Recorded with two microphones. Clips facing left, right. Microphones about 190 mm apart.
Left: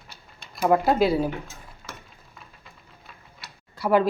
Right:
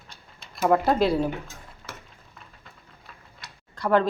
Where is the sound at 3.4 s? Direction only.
5° left (ahead or behind).